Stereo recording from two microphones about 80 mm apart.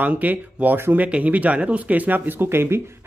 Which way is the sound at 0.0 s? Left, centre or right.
Right.